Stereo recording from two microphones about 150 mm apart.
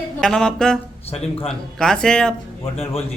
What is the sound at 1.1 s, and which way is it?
Speech, 40° left (ahead or behind).